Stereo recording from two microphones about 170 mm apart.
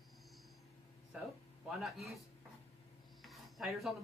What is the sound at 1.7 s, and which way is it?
Speech, centre (ahead or behind).